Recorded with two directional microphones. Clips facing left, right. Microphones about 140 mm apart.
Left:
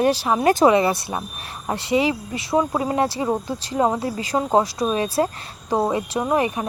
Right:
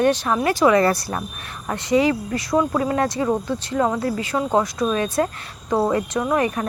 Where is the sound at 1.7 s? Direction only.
25° left (ahead or behind).